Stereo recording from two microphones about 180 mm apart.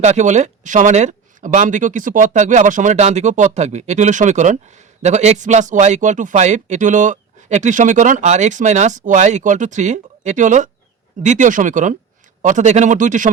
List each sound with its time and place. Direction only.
0.0 s a man's voice: 40° right (ahead or behind)